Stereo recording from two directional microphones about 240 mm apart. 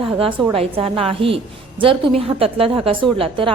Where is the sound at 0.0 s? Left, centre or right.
Right.